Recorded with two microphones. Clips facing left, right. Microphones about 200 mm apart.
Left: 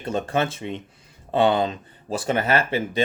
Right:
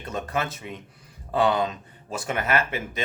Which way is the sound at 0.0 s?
30° left (ahead or behind).